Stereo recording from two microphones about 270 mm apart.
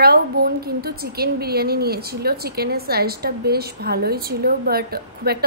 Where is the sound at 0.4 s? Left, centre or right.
Right.